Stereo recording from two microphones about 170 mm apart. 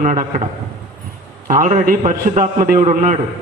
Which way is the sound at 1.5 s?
45° right (ahead or behind).